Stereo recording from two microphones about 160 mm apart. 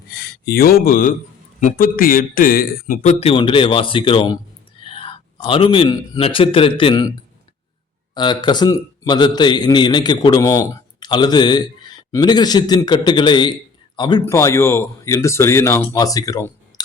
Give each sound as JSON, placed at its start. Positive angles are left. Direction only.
{"t": 0.1, "sound": "a man's voice", "side_deg": 85}
{"t": 4.8, "sound": "whispering", "side_deg": 35}
{"t": 5.5, "sound": "a man's voice", "side_deg": 35}
{"t": 8.1, "sound": "a man's voice", "side_deg": 30}